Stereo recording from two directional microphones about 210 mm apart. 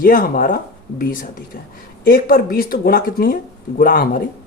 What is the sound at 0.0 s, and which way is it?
Speech, 40° left (ahead or behind).